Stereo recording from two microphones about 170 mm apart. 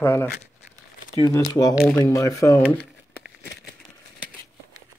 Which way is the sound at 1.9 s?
15° left (ahead or behind).